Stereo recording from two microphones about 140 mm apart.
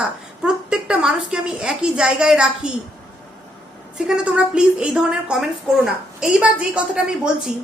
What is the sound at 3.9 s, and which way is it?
A woman's voice, 5° right (ahead or behind).